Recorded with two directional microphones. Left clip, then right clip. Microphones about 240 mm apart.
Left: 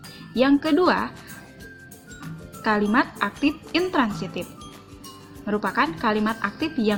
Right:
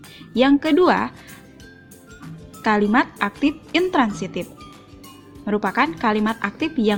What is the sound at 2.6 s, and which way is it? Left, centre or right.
Speech, right.